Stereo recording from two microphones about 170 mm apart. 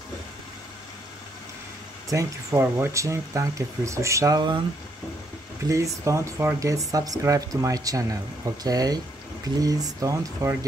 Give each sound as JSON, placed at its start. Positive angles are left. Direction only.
{"t": 2.0, "sound": "speech", "side_deg": -20}
{"t": 5.7, "sound": "speech", "side_deg": -20}